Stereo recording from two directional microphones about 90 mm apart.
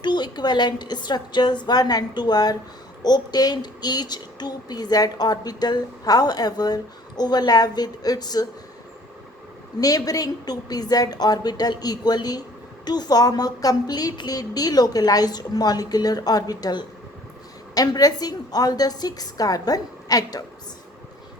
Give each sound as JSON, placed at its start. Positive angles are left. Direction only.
{"t": 0.0, "sound": "a woman's voice", "side_deg": 55}
{"t": 9.8, "sound": "a woman's voice", "side_deg": 40}